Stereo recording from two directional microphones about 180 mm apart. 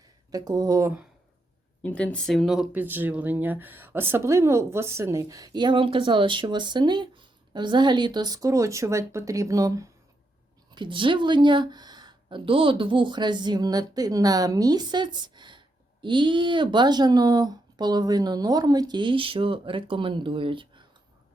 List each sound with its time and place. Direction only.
0.3 s speech: 20° right (ahead or behind)
1.8 s speech: 10° left (ahead or behind); by 20.8 s 30° right (ahead or behind)